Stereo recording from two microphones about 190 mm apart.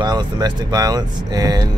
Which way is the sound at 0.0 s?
20° right (ahead or behind).